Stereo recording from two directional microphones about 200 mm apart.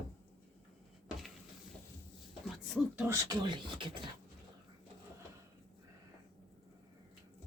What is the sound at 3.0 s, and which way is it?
Speech, 15° right (ahead or behind).